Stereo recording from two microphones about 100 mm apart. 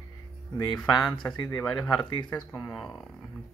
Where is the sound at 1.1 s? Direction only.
45° left (ahead or behind).